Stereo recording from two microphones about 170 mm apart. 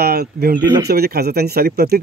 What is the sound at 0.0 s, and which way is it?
Speech, 65° right (ahead or behind).